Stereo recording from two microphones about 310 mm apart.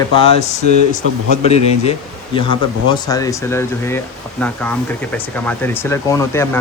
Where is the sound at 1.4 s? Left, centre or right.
Centre.